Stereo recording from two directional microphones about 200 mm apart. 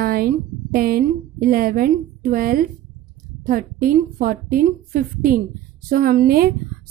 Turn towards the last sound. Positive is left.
turn(degrees=-50)  # may be behind; listen again after turning